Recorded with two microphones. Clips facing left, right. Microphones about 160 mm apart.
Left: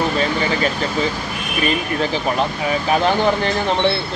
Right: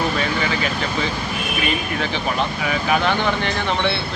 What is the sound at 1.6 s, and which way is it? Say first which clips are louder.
Speech: left 6 dB; 35° left (ahead or behind).